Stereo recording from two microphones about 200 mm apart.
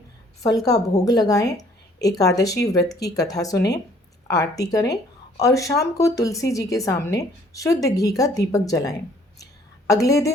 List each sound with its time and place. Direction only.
0.4 s a woman's voice: 20° left (ahead or behind)